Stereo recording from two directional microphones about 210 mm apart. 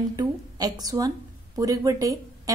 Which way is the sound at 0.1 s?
20° right (ahead or behind).